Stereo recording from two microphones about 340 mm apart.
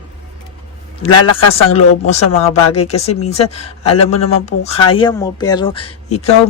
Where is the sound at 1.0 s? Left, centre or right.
Left.